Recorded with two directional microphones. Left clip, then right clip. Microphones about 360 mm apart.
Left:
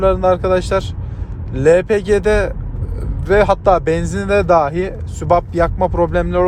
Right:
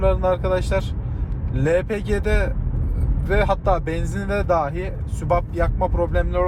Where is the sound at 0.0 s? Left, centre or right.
Left.